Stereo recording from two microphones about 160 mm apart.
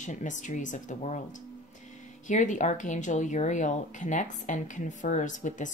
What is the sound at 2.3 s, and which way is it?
Speech, 50° left (ahead or behind).